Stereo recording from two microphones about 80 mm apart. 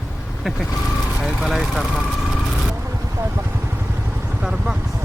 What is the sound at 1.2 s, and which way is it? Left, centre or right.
Speech, centre.